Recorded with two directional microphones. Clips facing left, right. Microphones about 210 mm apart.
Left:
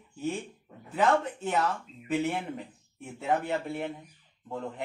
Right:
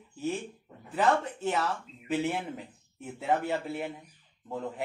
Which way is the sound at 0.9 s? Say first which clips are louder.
Left 1 dB; centre (ahead or behind).